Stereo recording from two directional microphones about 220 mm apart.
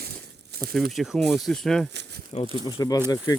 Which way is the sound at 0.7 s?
Centre (ahead or behind).